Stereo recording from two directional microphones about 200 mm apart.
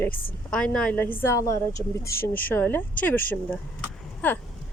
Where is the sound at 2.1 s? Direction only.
50° left (ahead or behind).